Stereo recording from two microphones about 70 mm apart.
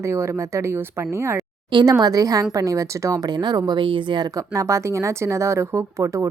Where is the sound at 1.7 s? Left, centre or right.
Right.